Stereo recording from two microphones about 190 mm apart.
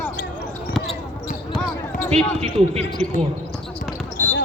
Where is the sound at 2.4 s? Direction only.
35° right (ahead or behind).